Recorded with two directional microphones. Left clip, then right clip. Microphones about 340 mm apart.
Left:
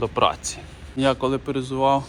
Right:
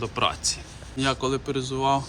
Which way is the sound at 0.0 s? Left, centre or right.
Centre.